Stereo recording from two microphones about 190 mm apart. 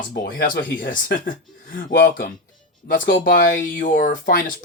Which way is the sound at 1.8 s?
60° left (ahead or behind).